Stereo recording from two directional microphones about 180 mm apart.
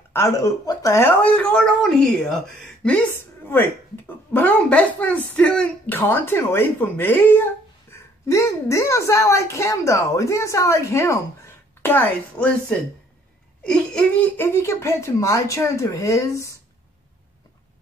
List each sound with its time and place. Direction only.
0.1 s speech: 15° left (ahead or behind)